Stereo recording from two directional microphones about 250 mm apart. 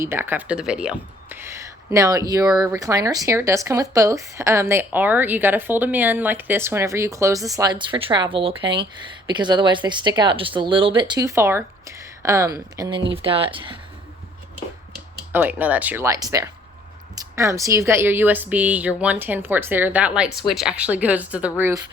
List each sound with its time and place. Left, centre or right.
0.0 s speech: centre
15.3 s speech: centre